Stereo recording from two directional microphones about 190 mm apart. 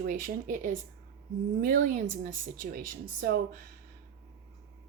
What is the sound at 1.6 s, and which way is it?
Speech, 45° right (ahead or behind).